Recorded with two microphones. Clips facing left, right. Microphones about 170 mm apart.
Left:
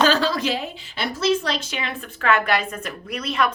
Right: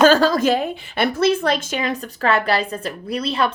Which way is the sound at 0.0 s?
45° right (ahead or behind).